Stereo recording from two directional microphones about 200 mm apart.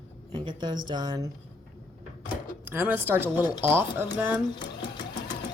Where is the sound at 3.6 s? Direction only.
10° right (ahead or behind).